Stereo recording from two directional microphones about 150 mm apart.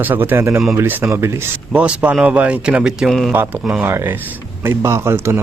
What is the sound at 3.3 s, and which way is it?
Speech, 15° right (ahead or behind).